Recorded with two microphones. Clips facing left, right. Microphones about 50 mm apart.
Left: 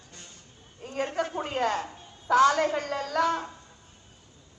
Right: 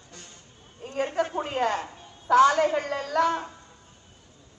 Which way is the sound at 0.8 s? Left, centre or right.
Centre.